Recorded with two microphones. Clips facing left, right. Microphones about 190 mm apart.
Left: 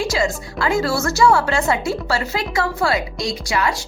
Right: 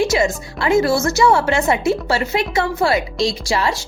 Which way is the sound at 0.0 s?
20° right (ahead or behind).